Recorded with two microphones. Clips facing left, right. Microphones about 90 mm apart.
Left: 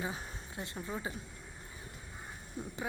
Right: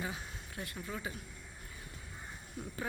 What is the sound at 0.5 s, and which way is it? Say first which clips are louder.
Speech: left 2 dB; 25° left (ahead or behind).